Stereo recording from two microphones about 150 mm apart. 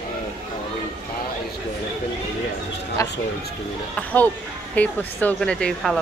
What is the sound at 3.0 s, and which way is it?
Speech, 20° left (ahead or behind).